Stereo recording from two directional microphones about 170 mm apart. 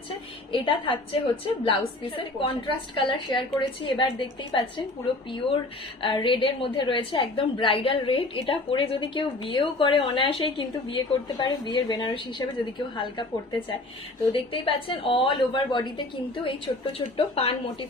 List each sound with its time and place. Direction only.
0.6 s a woman's voice: 30° left (ahead or behind)